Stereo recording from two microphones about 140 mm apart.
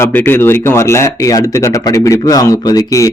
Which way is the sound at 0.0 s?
15° left (ahead or behind).